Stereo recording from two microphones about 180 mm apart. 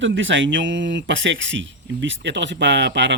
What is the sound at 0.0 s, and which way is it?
Speech, 90° right.